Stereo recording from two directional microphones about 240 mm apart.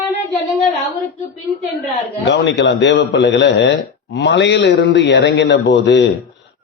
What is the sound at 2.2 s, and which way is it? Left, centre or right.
A man's voice, left.